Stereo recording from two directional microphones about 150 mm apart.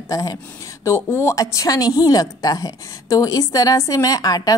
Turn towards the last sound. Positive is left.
turn(degrees=25)  # may be behind; listen again after turning